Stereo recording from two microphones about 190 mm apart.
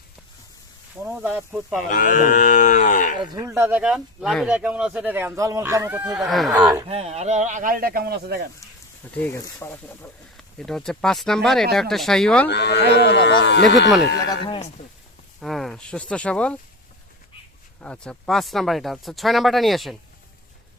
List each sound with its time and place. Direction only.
1.0 s speech: 10° right (ahead or behind)
1.9 s speech: 45° left (ahead or behind)
3.3 s speech: 15° right (ahead or behind)
6.8 s speech: 30° right (ahead or behind); by 8.4 s 55° right (ahead or behind)
9.1 s speech: 10° left (ahead or behind)
12.5 s speech: 60° left (ahead or behind)
14.3 s speech: 25° left (ahead or behind)
15.4 s speech: centre (ahead or behind)
17.7 s speech: 5° left (ahead or behind)